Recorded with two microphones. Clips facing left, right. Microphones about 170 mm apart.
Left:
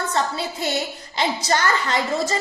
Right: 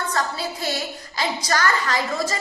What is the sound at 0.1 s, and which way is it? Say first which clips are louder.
A woman's voice: left 2 dB; 25° left (ahead or behind).